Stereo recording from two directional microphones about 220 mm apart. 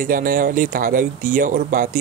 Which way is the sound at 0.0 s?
40° right (ahead or behind).